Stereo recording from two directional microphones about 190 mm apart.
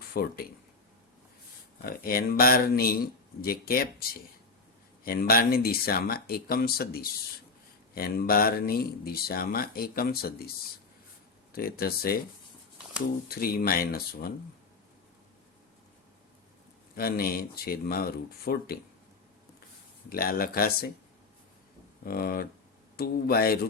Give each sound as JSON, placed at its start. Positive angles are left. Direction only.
{"t": 0.1, "sound": "speech", "side_deg": 50}
{"t": 1.8, "sound": "speech", "side_deg": 50}
{"t": 5.0, "sound": "speech", "side_deg": 50}
{"t": 11.5, "sound": "speech", "side_deg": 50}
{"t": 13.2, "sound": "speech", "side_deg": 50}
{"t": 16.9, "sound": "speech", "side_deg": 50}
{"t": 20.1, "sound": "speech", "side_deg": 50}
{"t": 22.0, "sound": "speech", "side_deg": 50}